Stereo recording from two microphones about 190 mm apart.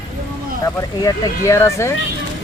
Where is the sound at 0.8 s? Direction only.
15° left (ahead or behind).